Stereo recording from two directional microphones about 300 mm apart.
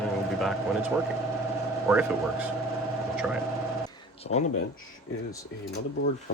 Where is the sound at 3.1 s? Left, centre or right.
Centre.